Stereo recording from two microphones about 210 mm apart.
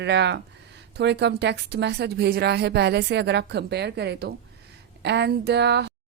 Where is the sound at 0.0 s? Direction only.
55° right (ahead or behind).